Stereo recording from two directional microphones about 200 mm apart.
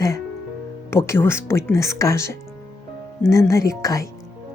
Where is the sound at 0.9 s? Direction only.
15° left (ahead or behind).